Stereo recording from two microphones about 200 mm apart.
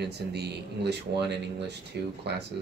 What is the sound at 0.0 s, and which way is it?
Speech, 55° right (ahead or behind).